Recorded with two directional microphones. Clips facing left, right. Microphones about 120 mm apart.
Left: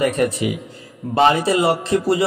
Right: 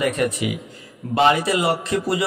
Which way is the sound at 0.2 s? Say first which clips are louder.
Left 3 dB; 35° left (ahead or behind).